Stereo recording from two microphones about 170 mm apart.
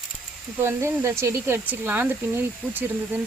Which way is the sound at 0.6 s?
15° right (ahead or behind).